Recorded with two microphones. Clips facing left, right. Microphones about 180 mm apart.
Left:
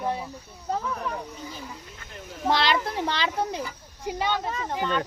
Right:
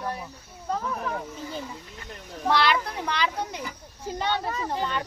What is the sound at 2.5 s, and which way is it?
A child's voice, 25° left (ahead or behind).